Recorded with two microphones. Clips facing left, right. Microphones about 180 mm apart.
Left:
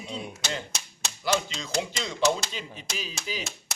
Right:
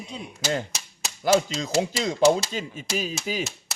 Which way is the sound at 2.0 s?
45° right (ahead or behind).